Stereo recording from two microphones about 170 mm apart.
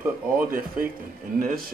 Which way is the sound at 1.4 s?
60° right (ahead or behind).